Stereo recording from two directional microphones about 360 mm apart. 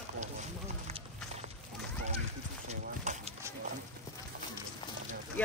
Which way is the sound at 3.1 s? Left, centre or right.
Centre.